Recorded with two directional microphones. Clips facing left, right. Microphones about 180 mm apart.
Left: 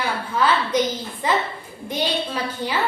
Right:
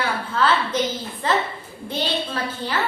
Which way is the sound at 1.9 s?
10° left (ahead or behind).